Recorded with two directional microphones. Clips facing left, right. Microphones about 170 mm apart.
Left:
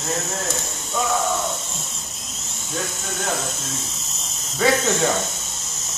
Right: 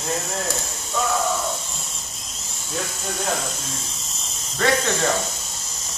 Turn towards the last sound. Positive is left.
turn(degrees=5)  # may be behind; listen again after turning